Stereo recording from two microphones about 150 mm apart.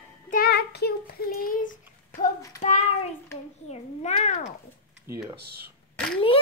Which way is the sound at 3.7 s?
50° left (ahead or behind).